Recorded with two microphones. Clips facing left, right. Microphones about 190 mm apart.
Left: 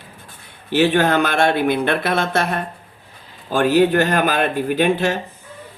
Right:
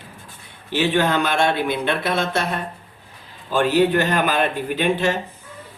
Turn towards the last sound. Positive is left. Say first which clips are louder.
# left 3 dB
turn(degrees=50)  # may be behind; listen again after turning